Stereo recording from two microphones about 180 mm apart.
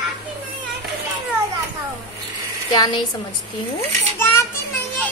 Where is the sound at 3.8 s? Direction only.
10° left (ahead or behind).